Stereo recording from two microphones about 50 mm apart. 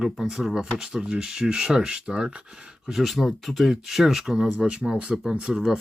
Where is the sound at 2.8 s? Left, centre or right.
Centre.